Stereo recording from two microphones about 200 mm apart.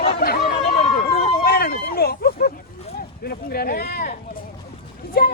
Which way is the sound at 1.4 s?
50° left (ahead or behind).